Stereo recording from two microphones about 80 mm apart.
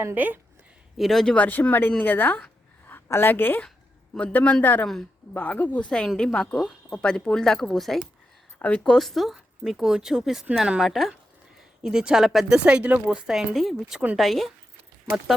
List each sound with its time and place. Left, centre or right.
0.0 s speech: right
0.9 s speech: centre
1.4 s a woman's voice: centre
8.5 s speech: centre
12.5 s speech: centre